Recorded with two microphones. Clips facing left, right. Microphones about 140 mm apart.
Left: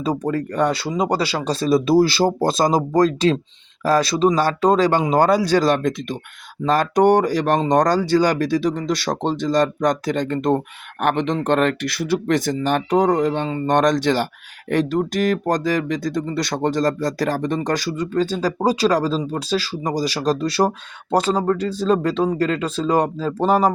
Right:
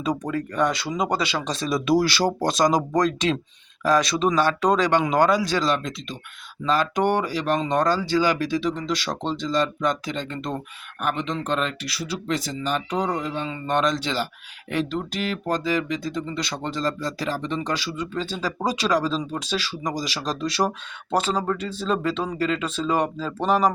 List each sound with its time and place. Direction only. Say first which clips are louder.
0.3 s speech: left 5 dB; 35° left (ahead or behind); by 10.6 s 50° left (ahead or behind)
11.0 s speech: left 7 dB; 60° left (ahead or behind); by 23.7 s 35° left (ahead or behind)